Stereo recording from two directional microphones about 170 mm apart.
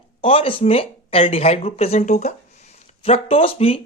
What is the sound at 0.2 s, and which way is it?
Speech, 35° left (ahead or behind).